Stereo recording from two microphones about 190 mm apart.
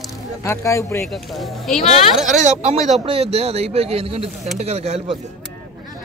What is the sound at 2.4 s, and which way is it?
Speech, 35° right (ahead or behind).